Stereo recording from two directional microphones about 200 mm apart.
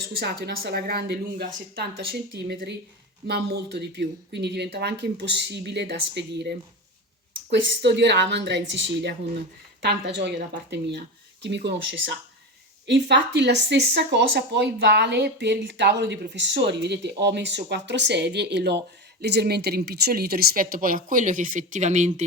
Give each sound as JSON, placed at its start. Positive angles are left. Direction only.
{"t": 0.1, "sound": "speech", "side_deg": -50}